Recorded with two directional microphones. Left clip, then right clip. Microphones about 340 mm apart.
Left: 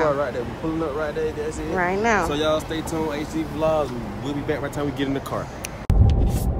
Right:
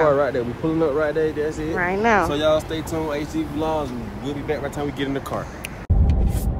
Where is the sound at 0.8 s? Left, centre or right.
Right.